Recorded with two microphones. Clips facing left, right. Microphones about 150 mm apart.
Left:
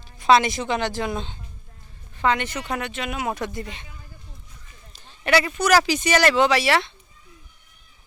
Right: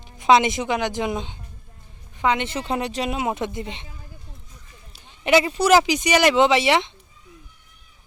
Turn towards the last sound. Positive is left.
turn(degrees=-20)  # may be behind; listen again after turning